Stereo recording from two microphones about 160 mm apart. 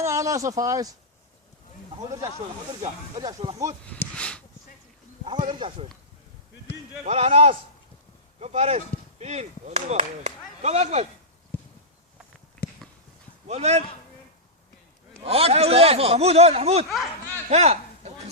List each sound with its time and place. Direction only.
0.0 s speech: 20° right (ahead or behind)
3.2 s speech: 25° right (ahead or behind)
3.8 s speech: 5° left (ahead or behind)
5.2 s speech: 30° right (ahead or behind)
7.0 s speech: 40° right (ahead or behind)
13.5 s speech: 40° right (ahead or behind)
15.2 s speech: 40° right (ahead or behind)
17.5 s a sound: 40° right (ahead or behind)